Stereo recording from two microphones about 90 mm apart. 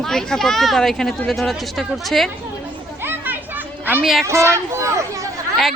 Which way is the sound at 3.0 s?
20° right (ahead or behind).